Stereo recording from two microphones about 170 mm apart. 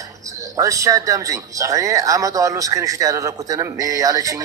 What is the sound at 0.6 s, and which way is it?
Speech, 20° right (ahead or behind).